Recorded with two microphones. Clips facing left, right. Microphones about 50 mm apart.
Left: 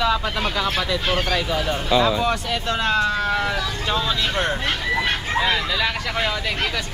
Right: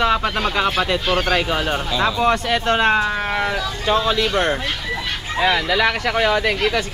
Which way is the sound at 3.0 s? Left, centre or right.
Right.